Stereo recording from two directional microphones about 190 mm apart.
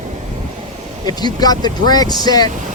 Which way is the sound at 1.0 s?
20° left (ahead or behind).